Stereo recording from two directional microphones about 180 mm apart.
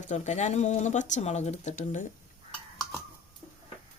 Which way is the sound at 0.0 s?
40° left (ahead or behind).